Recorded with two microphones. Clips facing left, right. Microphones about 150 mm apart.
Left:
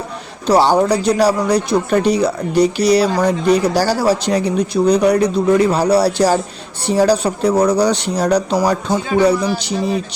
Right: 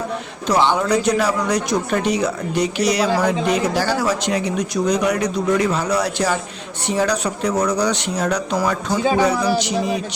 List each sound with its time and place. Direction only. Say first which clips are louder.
0.4 s speech: left 5 dB; 35° left (ahead or behind)